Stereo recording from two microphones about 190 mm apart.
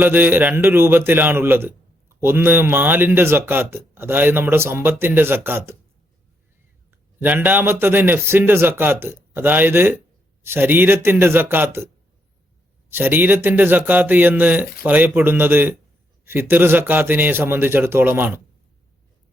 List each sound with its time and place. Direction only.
0.0 s a man's voice: 10° right (ahead or behind)
6.9 s a man's voice: 10° right (ahead or behind)
12.9 s a man's voice: 10° right (ahead or behind)